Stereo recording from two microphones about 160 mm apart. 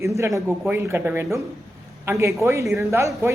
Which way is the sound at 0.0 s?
20° right (ahead or behind).